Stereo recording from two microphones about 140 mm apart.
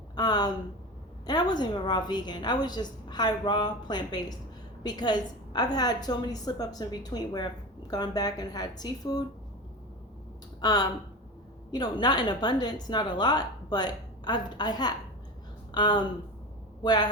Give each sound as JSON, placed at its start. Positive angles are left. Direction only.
{"t": 0.2, "sound": "a woman's voice", "side_deg": 30}
{"t": 10.6, "sound": "a woman's voice", "side_deg": 30}